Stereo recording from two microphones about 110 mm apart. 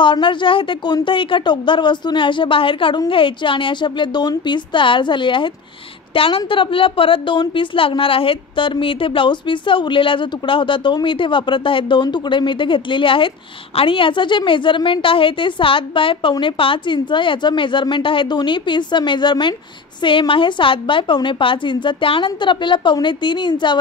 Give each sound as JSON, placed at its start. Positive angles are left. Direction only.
{"t": 0.0, "sound": "a woman's voice", "side_deg": 45}